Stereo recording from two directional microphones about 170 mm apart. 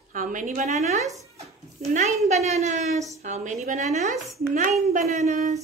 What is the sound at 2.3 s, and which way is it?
A woman's voice, 40° right (ahead or behind).